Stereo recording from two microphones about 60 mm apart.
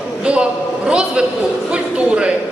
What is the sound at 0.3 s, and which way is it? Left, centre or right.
Speech, centre.